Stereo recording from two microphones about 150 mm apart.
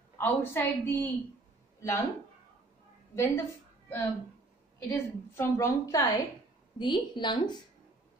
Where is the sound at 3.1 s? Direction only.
20° left (ahead or behind).